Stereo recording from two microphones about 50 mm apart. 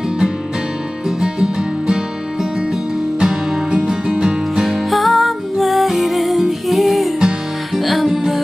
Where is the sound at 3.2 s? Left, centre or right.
Centre.